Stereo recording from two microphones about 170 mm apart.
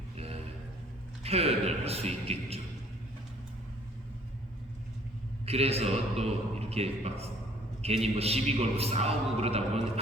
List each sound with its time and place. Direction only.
1.2 s a man's voice: 35° right (ahead or behind)
5.5 s a man's voice: 35° right (ahead or behind)